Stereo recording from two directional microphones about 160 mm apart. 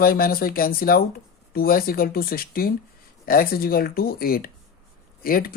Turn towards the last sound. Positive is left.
turn(degrees=65)  # may be behind; listen again after turning